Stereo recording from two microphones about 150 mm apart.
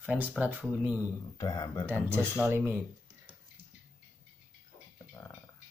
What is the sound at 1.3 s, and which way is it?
Speech, 30° left (ahead or behind).